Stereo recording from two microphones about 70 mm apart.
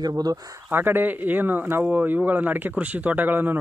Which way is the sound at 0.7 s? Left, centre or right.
Right.